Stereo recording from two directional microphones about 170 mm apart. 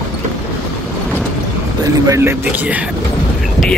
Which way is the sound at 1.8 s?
20° right (ahead or behind).